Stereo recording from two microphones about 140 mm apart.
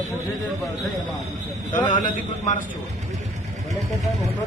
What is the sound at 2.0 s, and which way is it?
Speech, 65° left (ahead or behind).